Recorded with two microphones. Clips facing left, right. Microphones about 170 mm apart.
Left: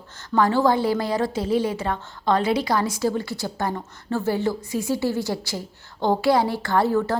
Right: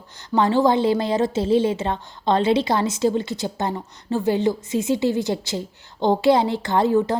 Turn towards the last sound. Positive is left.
turn(degrees=-20)  # may be behind; listen again after turning